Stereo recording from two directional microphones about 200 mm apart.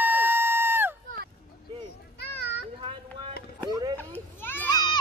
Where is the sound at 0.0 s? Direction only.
10° right (ahead or behind).